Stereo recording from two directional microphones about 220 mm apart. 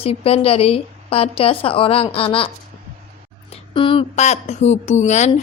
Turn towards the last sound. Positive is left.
turn(degrees=30)  # may be behind; listen again after turning